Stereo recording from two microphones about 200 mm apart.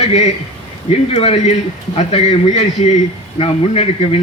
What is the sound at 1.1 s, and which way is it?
A man's voice, 30° left (ahead or behind).